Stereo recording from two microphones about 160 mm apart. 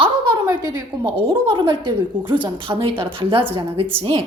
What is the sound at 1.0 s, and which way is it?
A woman's voice, 35° right (ahead or behind).